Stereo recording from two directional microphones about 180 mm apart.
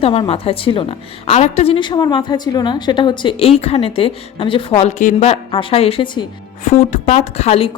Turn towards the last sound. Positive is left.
turn(degrees=35)  # may be behind; listen again after turning